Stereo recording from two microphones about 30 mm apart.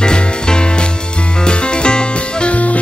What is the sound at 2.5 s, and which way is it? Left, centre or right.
Music, left.